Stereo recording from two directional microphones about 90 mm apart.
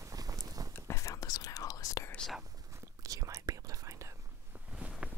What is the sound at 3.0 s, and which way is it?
Whispering, 40° right (ahead or behind).